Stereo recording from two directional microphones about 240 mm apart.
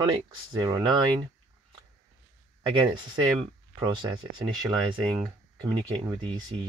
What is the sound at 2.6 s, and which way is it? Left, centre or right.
Speech, centre.